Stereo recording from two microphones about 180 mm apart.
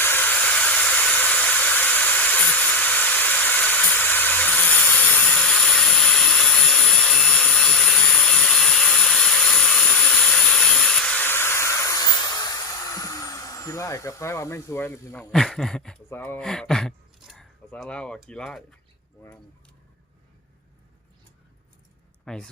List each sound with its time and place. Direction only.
0.0 s a sound: 10° left (ahead or behind)
15.3 s speech: centre (ahead or behind)
22.2 s speech: 5° left (ahead or behind)